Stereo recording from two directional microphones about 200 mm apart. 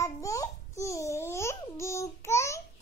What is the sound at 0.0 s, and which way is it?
Babbling, 15° left (ahead or behind).